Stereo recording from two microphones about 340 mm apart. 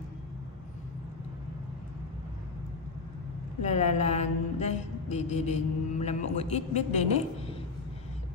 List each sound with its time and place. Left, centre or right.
3.6 s mantra: centre